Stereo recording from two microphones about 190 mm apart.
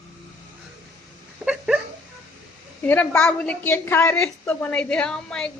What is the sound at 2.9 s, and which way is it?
A woman's voice, 5° left (ahead or behind).